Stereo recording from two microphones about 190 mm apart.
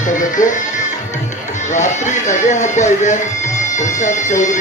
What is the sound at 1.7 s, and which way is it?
Speech, 40° left (ahead or behind).